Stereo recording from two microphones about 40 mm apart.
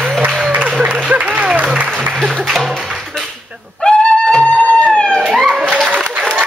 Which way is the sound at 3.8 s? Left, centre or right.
Centre.